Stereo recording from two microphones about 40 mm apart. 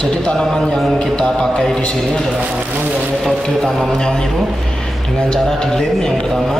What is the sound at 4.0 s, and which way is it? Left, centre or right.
Speech, centre.